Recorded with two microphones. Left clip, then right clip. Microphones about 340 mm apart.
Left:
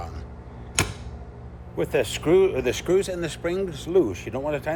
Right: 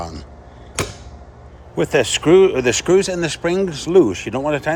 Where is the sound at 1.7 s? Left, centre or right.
Right.